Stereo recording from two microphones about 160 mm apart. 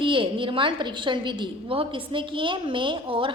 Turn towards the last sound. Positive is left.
turn(degrees=-35)  # may be behind; listen again after turning